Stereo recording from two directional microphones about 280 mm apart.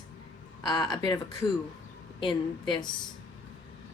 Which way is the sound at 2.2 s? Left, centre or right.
Centre.